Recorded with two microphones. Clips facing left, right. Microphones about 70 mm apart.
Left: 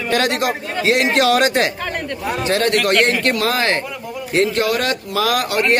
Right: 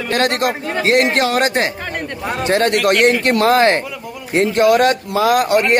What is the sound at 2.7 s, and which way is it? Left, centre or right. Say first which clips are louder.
A man's voice: right 3 dB; centre.